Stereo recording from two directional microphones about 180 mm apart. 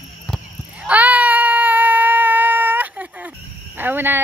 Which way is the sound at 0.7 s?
10° right (ahead or behind).